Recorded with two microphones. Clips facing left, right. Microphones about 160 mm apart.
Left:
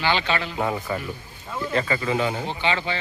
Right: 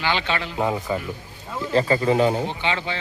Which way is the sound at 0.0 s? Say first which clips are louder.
Left 1 dB; 15° right (ahead or behind).